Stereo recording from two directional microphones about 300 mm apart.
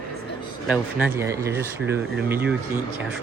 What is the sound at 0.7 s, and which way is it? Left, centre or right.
Speech, centre.